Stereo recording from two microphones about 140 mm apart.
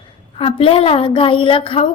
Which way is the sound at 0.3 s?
45° left (ahead or behind).